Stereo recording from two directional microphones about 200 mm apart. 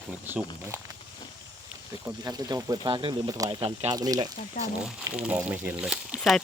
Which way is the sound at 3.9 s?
20° right (ahead or behind).